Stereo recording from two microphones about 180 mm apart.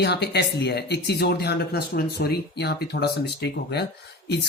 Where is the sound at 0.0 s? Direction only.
65° left (ahead or behind).